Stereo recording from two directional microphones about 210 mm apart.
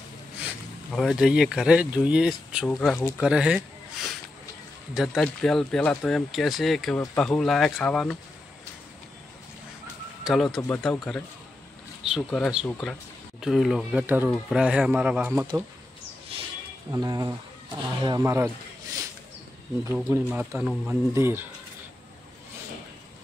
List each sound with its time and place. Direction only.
0.9 s speech: centre (ahead or behind)
2.7 s speech: 5° left (ahead or behind)
3.3 s speech: 5° right (ahead or behind)
4.9 s speech: centre (ahead or behind)
10.2 s speech: centre (ahead or behind)
16.3 s a sound: 25° right (ahead or behind)
16.9 s speech: 15° right (ahead or behind)
19.8 s speech: 15° right (ahead or behind)